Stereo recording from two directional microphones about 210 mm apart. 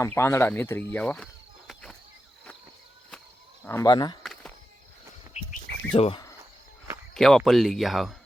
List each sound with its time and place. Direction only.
0.0 s speech: 15° left (ahead or behind)
3.6 s speech: 10° left (ahead or behind)
4.2 s a sound: centre (ahead or behind)
5.4 s bird: 35° left (ahead or behind)
5.9 s speech: 25° left (ahead or behind)
7.1 s speech: centre (ahead or behind)